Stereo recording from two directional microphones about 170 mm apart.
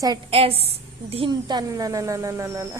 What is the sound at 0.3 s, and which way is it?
A woman's voice, 35° right (ahead or behind).